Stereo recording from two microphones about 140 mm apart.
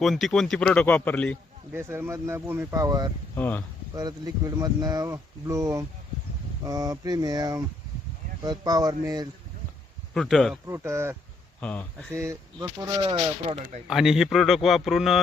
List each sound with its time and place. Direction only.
0.0 s speech: centre (ahead or behind)
1.7 s speech: 15° right (ahead or behind)
3.3 s speech: 15° left (ahead or behind)
3.9 s speech: 25° right (ahead or behind)
10.2 s speech: centre (ahead or behind)
10.7 s speech: 20° right (ahead or behind)
11.6 s speech: 10° left (ahead or behind)
12.1 s speech: 20° right (ahead or behind)
13.8 s speech: 5° right (ahead or behind)